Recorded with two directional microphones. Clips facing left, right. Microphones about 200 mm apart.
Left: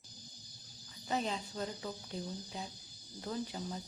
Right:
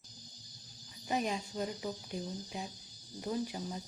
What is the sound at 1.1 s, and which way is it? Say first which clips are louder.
Speech: right 2 dB; 15° right (ahead or behind).